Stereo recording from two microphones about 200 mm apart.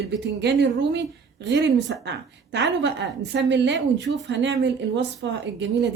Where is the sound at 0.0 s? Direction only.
60° right (ahead or behind).